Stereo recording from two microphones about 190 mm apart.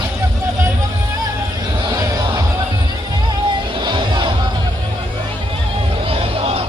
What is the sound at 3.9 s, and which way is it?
Music, 25° right (ahead or behind).